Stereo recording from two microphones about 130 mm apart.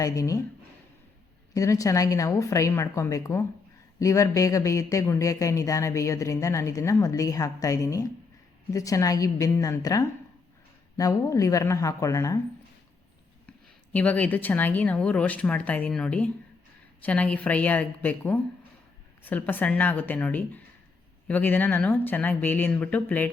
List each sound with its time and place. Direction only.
0.0 s speech: 25° left (ahead or behind)
1.5 s speech: 25° left (ahead or behind)
13.9 s speech: 10° left (ahead or behind)